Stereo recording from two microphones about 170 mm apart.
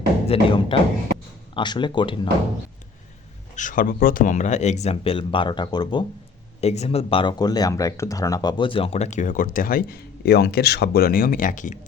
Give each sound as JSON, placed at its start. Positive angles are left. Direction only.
{"t": 0.3, "sound": "speech", "side_deg": 30}
{"t": 3.5, "sound": "speech", "side_deg": 50}
{"t": 6.6, "sound": "speech", "side_deg": 40}